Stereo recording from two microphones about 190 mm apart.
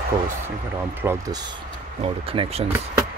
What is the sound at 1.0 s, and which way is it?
Speech, 15° right (ahead or behind).